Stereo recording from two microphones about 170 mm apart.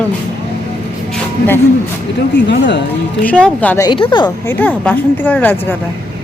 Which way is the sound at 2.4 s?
90° left.